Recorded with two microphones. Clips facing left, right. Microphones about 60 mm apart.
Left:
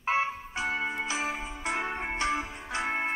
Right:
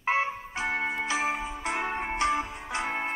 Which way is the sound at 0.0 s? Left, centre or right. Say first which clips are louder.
Right 1 dB; right.